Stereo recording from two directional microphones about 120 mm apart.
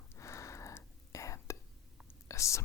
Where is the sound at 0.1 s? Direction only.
25° left (ahead or behind).